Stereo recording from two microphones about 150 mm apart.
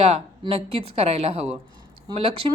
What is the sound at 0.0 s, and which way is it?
A woman's voice, 40° right (ahead or behind).